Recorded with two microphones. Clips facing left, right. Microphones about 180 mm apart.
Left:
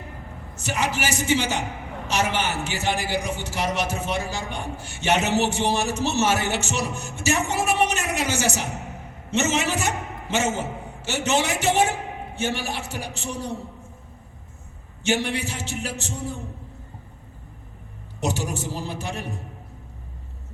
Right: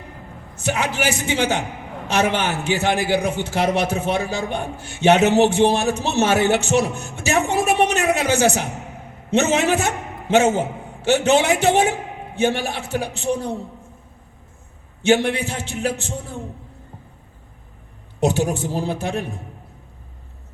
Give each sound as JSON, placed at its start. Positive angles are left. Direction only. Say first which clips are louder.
{"t": 0.5, "sound": "a man's voice", "louder": "right 3 dB", "side_deg": -60}
{"t": 15.0, "sound": "a man's voice", "louder": "right 7 dB", "side_deg": -60}
{"t": 18.2, "sound": "a man's voice", "louder": "right 7 dB", "side_deg": -55}